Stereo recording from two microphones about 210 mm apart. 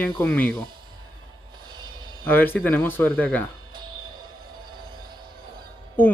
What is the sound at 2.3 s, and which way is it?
Speech, 10° left (ahead or behind).